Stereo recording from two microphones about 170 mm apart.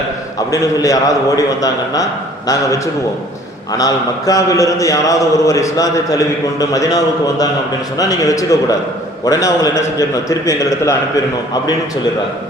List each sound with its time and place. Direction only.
0.5 s a man's voice: 20° left (ahead or behind)